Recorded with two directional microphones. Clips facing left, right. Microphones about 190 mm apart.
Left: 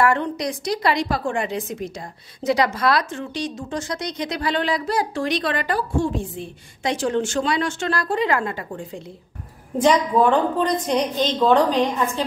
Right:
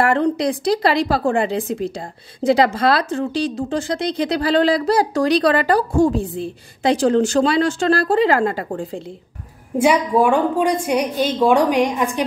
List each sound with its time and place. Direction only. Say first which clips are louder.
0.0 s speech: right 4 dB; 30° right (ahead or behind)
9.8 s a woman's voice: right 2 dB; 10° right (ahead or behind)